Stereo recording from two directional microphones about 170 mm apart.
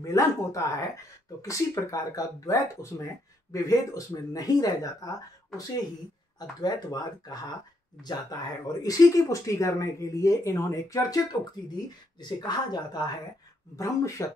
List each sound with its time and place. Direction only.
0.0 s speech: 20° left (ahead or behind)
6.6 s speech: 25° left (ahead or behind)